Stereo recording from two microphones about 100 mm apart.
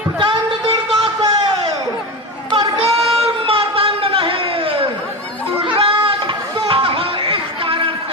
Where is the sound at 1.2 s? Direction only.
40° right (ahead or behind).